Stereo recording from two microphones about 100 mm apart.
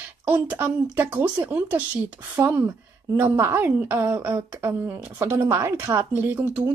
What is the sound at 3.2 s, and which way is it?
A woman's voice, 25° right (ahead or behind).